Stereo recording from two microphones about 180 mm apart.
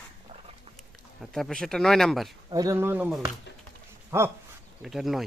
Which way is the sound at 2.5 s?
20° right (ahead or behind).